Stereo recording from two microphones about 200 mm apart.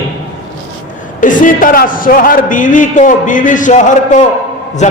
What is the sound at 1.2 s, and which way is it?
A man's voice, 40° left (ahead or behind).